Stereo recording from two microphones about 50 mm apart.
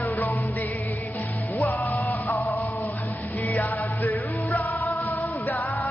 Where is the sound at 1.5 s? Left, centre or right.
Left.